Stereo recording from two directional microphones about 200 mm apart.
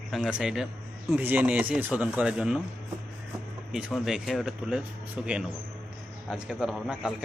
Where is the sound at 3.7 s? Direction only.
Centre (ahead or behind).